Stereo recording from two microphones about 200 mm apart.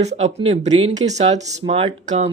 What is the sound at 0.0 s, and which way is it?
Speech, 30° right (ahead or behind).